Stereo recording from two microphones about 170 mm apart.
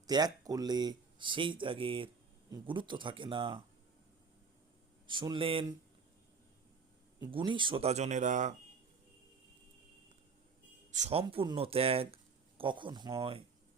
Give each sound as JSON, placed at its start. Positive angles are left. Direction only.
{"t": 0.1, "sound": "speech", "side_deg": -25}
{"t": 5.0, "sound": "speech", "side_deg": -30}
{"t": 7.2, "sound": "speech", "side_deg": -30}
{"t": 10.9, "sound": "speech", "side_deg": -40}